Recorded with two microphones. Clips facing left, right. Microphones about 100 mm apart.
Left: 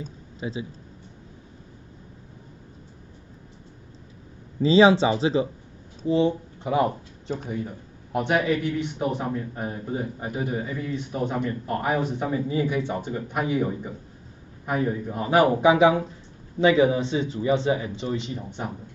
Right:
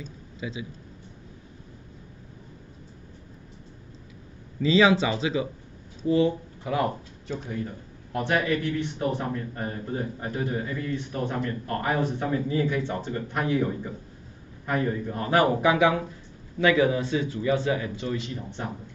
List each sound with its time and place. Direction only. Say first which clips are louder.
0.0 s speech: left 3 dB; 35° left (ahead or behind)
4.6 s speech: left 4 dB; 30° left (ahead or behind)